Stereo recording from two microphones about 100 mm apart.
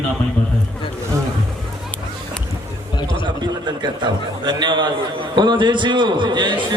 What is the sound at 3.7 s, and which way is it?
A man's voice, 50° right (ahead or behind).